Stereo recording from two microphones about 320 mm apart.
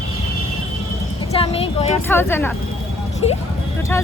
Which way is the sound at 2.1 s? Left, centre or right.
Centre.